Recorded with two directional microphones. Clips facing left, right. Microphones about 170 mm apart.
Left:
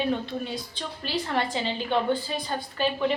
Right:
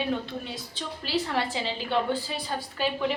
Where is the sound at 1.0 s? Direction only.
5° right (ahead or behind).